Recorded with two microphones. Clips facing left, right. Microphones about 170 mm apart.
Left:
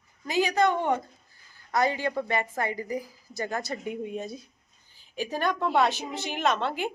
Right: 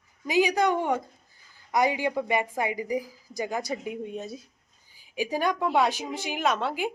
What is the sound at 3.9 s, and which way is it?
A woman's voice, centre (ahead or behind).